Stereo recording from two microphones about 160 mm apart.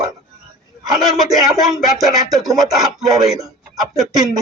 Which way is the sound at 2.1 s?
25° right (ahead or behind).